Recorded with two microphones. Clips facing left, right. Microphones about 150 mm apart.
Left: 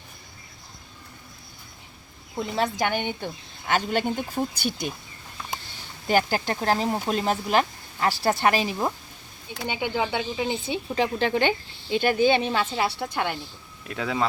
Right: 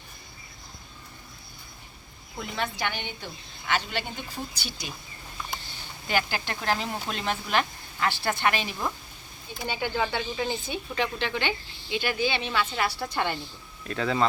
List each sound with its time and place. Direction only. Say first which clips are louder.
2.4 s speech: left 6 dB; 40° left (ahead or behind)
6.1 s speech: left 6 dB; 40° left (ahead or behind)
9.6 s speech: left 2 dB; 15° left (ahead or behind)
10.7 s speech: left 4 dB; 30° left (ahead or behind)
12.7 s a woman's voice: left 3 dB; 20° left (ahead or behind)
13.1 s speech: left 1 dB; 5° left (ahead or behind)